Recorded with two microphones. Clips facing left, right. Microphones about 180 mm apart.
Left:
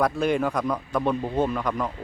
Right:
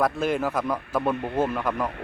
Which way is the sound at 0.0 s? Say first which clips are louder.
Left 1 dB; centre (ahead or behind).